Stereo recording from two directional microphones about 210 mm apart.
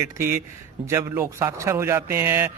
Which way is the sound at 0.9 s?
15° right (ahead or behind).